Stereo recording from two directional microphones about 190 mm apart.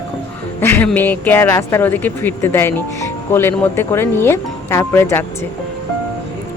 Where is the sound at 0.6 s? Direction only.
10° left (ahead or behind).